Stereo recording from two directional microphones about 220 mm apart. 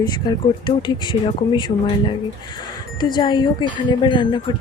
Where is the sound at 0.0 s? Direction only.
20° left (ahead or behind).